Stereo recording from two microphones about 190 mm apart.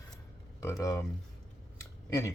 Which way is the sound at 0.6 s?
15° left (ahead or behind).